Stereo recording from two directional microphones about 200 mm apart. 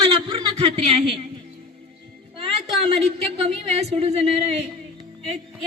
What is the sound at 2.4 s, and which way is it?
Speech, 30° right (ahead or behind).